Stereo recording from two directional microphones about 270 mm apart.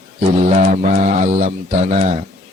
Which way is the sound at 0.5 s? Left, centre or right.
Right.